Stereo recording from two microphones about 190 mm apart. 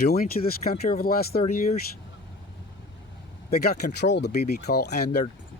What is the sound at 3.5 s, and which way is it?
Speech, 55° left (ahead or behind).